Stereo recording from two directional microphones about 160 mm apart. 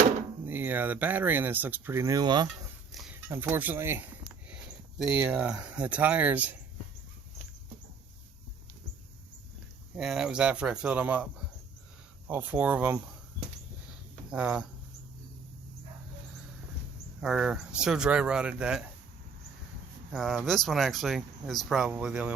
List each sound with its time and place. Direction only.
0.4 s speech: 10° right (ahead or behind)
2.9 s a sound: centre (ahead or behind)
3.2 s speech: 15° right (ahead or behind)
5.1 s speech: 10° right (ahead or behind)
9.9 s speech: centre (ahead or behind)
12.3 s speech: 10° right (ahead or behind)
14.3 s speech: 5° right (ahead or behind)
17.2 s speech: 5° right (ahead or behind)
20.1 s speech: centre (ahead or behind)